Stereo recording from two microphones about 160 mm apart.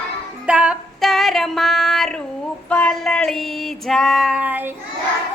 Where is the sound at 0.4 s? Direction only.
5° right (ahead or behind).